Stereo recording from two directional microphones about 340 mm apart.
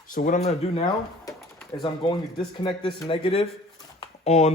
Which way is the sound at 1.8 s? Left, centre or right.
Centre.